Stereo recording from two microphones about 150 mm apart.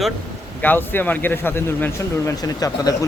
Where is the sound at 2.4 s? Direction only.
25° left (ahead or behind).